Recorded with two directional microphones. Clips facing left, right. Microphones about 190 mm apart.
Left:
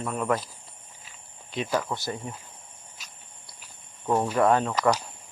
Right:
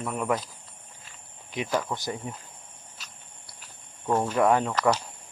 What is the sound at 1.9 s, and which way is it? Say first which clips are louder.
Speech: even; 5° left (ahead or behind).